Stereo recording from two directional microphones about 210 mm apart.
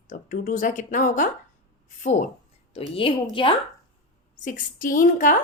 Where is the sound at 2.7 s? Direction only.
25° left (ahead or behind).